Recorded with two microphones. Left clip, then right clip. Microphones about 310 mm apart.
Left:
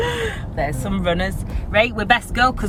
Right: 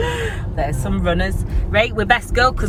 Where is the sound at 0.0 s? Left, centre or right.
Left.